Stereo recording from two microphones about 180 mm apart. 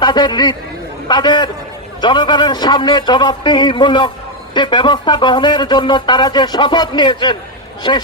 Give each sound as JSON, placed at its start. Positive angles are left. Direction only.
{"t": 0.0, "sound": "speech", "side_deg": 25}